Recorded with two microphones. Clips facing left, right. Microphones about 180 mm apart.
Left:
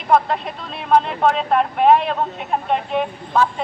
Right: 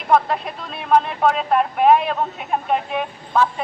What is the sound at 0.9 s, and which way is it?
Speech, 5° right (ahead or behind).